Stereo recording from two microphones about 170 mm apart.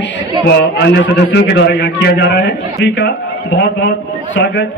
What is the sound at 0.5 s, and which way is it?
A man's voice, 85° left.